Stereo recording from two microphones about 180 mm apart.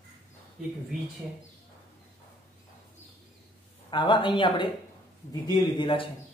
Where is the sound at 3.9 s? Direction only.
25° left (ahead or behind).